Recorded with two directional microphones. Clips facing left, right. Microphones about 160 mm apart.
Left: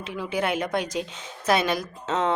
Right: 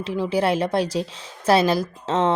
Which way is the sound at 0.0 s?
35° right (ahead or behind).